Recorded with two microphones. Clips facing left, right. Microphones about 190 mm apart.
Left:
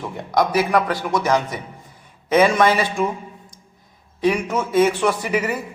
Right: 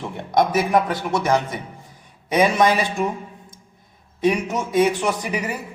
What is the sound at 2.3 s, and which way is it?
Speech, 15° right (ahead or behind).